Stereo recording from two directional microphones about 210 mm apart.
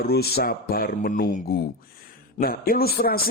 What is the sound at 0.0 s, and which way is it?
Speech, 50° left (ahead or behind).